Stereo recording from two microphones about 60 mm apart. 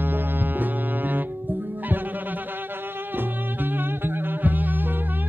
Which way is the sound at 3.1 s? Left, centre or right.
Right.